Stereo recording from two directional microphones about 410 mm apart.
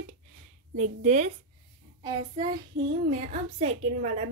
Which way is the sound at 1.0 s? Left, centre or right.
Centre.